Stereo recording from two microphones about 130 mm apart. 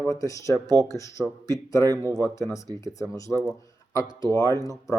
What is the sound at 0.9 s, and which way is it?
Speech, 25° left (ahead or behind).